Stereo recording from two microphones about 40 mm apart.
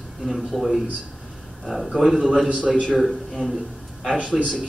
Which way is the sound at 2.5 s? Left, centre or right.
Right.